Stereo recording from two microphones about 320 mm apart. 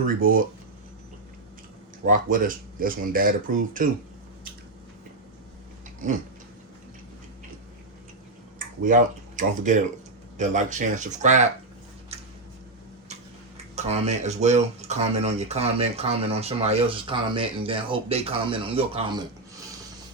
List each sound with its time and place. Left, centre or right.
0.0 s speech: right
2.0 s speech: right
8.5 s speech: right
12.1 s a sound: centre
13.7 s speech: centre